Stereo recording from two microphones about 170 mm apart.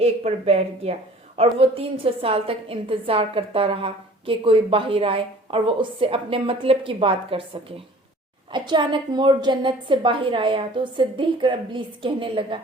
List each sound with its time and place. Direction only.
0.0 s a woman's voice: 40° right (ahead or behind)